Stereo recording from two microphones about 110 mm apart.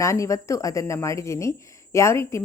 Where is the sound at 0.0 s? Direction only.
30° left (ahead or behind).